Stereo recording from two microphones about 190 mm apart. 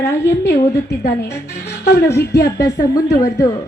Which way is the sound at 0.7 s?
60° left (ahead or behind).